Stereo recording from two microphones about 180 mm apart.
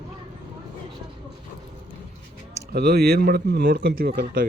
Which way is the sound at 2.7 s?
60° right (ahead or behind).